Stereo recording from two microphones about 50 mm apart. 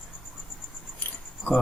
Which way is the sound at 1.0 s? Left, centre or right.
Left.